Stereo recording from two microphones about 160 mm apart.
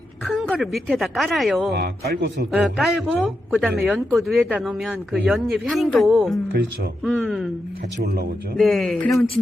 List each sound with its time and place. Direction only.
0.3 s a sound: centre (ahead or behind)
0.5 s speech: centre (ahead or behind)
1.7 s speech: 85° right
2.5 s speech: centre (ahead or behind)
7.9 s speech: 85° right
8.5 s speech: centre (ahead or behind)